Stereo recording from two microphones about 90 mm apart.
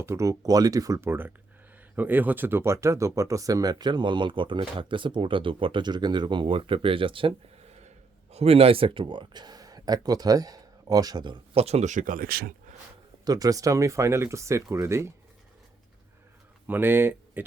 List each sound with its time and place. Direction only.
0.0 s speech: 30° right (ahead or behind)
1.0 s speech: 25° right (ahead or behind); by 7.3 s 75° right (ahead or behind)
8.4 s speech: 90° right; by 11.6 s 60° right (ahead or behind)
13.2 s speech: 45° right (ahead or behind)
16.6 s speech: 25° right (ahead or behind)